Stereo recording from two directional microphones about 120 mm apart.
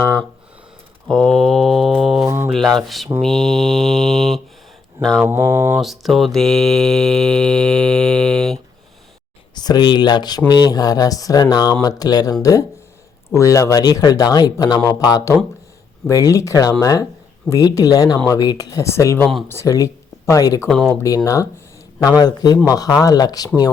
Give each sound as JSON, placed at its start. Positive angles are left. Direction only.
{"t": 0.0, "sound": "a sound", "side_deg": 20}
{"t": 1.0, "sound": "mantra", "side_deg": 5}
{"t": 2.2, "sound": "mantra", "side_deg": -20}
{"t": 2.5, "sound": "a sound", "side_deg": 0}
{"t": 3.2, "sound": "mantra", "side_deg": 5}
{"t": 4.9, "sound": "speech", "side_deg": 5}
{"t": 5.2, "sound": "mantra", "side_deg": -20}
{"t": 5.8, "sound": "mantra", "side_deg": 0}
{"t": 9.6, "sound": "speech", "side_deg": 35}
{"t": 20.7, "sound": "mantra", "side_deg": 5}
{"t": 22.2, "sound": "speech", "side_deg": 35}